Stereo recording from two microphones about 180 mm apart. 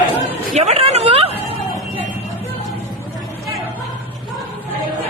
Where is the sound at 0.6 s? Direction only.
35° right (ahead or behind).